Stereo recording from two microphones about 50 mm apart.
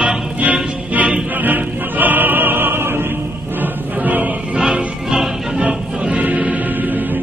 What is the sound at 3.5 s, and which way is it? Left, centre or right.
Music, right.